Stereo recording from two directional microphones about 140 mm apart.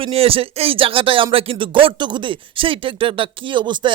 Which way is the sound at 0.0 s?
45° right (ahead or behind).